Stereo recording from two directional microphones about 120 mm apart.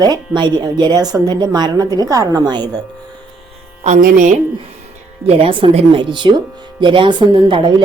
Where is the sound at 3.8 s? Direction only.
80° right.